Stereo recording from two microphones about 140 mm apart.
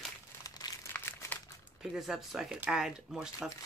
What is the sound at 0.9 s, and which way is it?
Crumpling, 15° left (ahead or behind).